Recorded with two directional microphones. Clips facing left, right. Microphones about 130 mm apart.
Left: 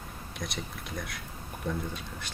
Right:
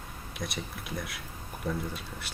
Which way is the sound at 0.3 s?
Centre (ahead or behind).